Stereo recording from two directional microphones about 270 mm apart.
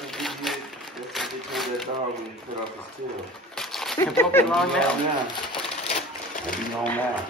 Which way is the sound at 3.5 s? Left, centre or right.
Centre.